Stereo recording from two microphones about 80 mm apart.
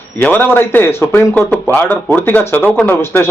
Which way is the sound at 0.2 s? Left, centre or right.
Left.